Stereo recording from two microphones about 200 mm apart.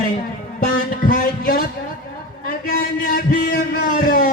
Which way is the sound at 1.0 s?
45° left (ahead or behind).